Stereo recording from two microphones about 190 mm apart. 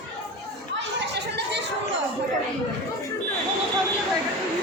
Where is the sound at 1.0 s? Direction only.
65° right (ahead or behind).